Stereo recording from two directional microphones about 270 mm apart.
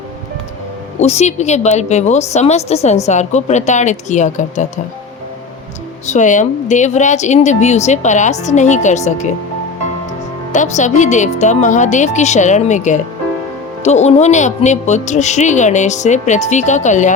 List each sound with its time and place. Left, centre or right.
0.9 s a woman's voice: left
6.1 s a woman's voice: left
10.5 s a woman's voice: left